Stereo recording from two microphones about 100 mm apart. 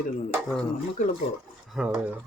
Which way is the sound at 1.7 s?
5° right (ahead or behind).